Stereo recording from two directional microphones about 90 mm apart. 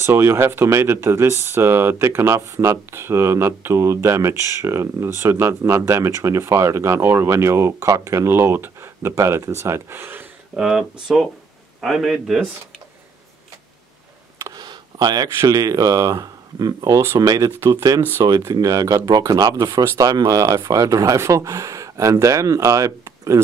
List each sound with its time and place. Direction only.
0.0 s speech: 30° right (ahead or behind)
10.5 s a man's voice: 5° right (ahead or behind)
14.5 s a sound: 50° right (ahead or behind)
15.4 s speech: 40° right (ahead or behind)
17.5 s speech: 30° right (ahead or behind)
18.2 s speech: 40° right (ahead or behind)